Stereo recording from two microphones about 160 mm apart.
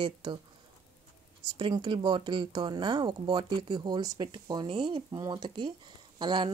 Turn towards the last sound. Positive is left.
turn(degrees=-30)  # may be behind; listen again after turning